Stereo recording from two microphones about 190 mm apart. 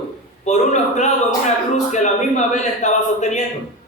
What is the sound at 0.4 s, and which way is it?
A man's voice, 40° left (ahead or behind).